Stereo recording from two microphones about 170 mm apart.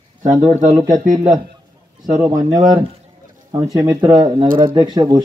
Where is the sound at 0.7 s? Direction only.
25° right (ahead or behind).